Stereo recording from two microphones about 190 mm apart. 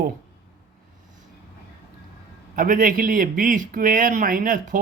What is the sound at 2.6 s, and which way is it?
Speech, 45° right (ahead or behind).